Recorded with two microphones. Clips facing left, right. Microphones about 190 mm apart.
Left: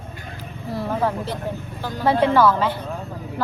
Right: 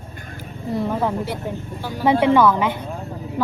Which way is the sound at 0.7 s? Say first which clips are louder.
Right 1 dB; 20° right (ahead or behind).